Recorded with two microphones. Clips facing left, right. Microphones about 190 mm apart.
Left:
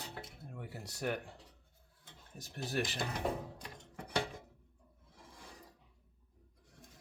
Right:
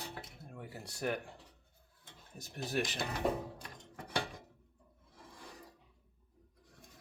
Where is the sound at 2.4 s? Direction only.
15° right (ahead or behind).